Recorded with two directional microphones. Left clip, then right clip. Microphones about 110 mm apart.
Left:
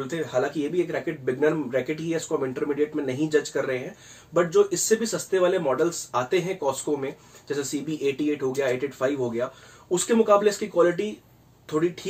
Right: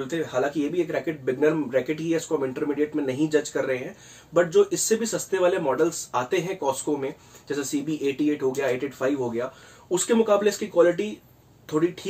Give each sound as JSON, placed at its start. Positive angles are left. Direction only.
{"t": 0.0, "sound": "speech", "side_deg": -25}